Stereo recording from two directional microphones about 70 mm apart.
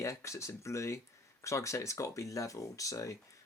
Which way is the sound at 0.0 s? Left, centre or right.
Left.